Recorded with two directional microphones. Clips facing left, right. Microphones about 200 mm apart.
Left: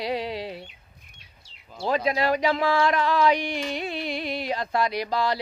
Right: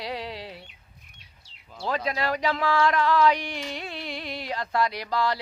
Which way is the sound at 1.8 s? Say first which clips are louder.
Left 4 dB; 15° left (ahead or behind).